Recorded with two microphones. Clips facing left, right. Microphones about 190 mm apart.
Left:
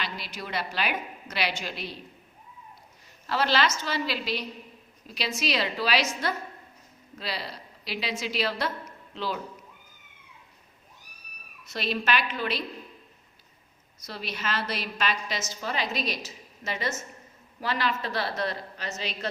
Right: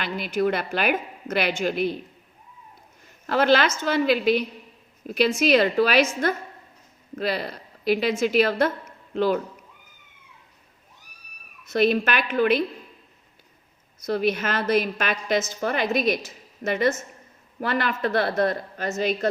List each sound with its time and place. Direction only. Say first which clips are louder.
0.0 s a woman's voice: right 13 dB; 50° right (ahead or behind)
3.2 s a woman's voice: right 6 dB; 50° right (ahead or behind)
11.6 s a woman's voice: right 9 dB; 50° right (ahead or behind)
14.0 s a woman's voice: right 12 dB; 50° right (ahead or behind)